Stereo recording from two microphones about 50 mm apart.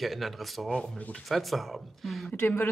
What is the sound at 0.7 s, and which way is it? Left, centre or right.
Speech, centre.